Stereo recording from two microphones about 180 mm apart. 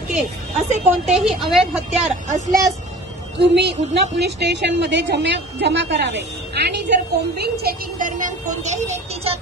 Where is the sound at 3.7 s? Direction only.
40° right (ahead or behind).